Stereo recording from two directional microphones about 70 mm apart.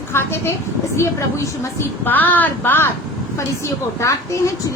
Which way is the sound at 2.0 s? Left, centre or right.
Left.